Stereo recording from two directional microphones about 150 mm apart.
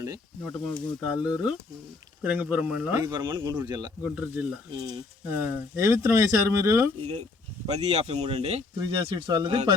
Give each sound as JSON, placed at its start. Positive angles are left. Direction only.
{"t": 0.4, "sound": "speech", "side_deg": 5}
{"t": 1.0, "sound": "speech", "side_deg": -10}
{"t": 3.0, "sound": "speech", "side_deg": -30}
{"t": 4.1, "sound": "speech", "side_deg": -10}
{"t": 7.7, "sound": "speech", "side_deg": -45}
{"t": 8.8, "sound": "speech", "side_deg": -30}